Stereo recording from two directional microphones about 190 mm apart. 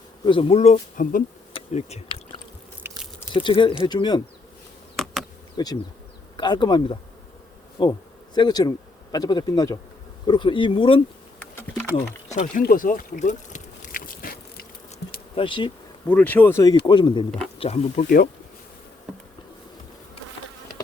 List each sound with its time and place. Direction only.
0.3 s speech: 30° left (ahead or behind)
1.5 s a sound: 30° left (ahead or behind)
2.8 s biting: 15° right (ahead or behind)
3.3 s speech: 25° left (ahead or behind)
5.0 s bee: 5° left (ahead or behind)
5.6 s speech: 20° left (ahead or behind)
11.3 s bee: 10° left (ahead or behind)
12.6 s a sound: 45° left (ahead or behind)
15.4 s speech: 25° left (ahead or behind)
16.0 s speech: 10° left (ahead or behind); by 18.0 s 35° left (ahead or behind)